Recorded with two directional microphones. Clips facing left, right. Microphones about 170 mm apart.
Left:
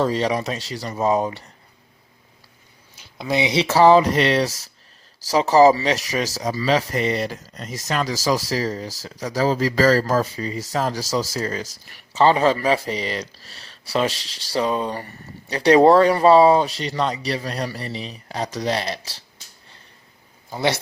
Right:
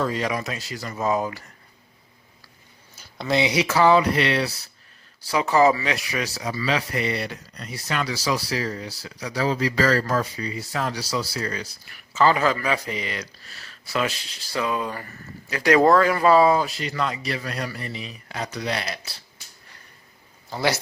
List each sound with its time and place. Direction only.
0.0 s speech: 35° left (ahead or behind)
3.2 s speech: 20° left (ahead or behind)
3.6 s speech: 35° left (ahead or behind)
20.5 s speech: 20° left (ahead or behind)